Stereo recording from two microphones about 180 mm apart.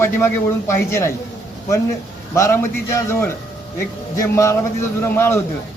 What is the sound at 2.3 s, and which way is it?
A man's voice, 15° left (ahead or behind).